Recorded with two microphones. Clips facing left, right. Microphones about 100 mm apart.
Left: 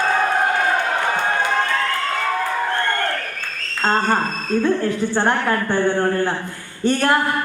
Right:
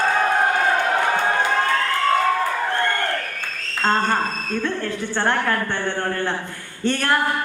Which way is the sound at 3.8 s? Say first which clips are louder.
Left 1 dB; 20° left (ahead or behind).